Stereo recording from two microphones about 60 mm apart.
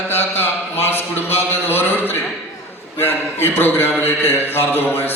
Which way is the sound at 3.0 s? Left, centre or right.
Left.